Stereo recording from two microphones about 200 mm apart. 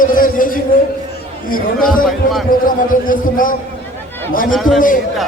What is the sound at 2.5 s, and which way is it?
A man's voice, 45° left (ahead or behind).